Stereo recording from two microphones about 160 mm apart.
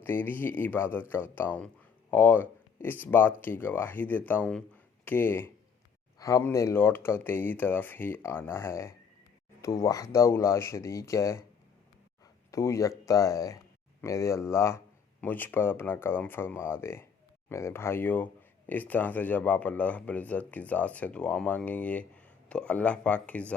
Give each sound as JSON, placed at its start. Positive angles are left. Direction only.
{"t": 0.0, "sound": "speech", "side_deg": 15}
{"t": 12.5, "sound": "speech", "side_deg": 20}